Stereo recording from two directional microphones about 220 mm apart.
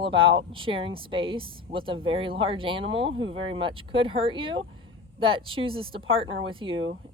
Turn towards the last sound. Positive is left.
turn(degrees=-25)  # may be behind; listen again after turning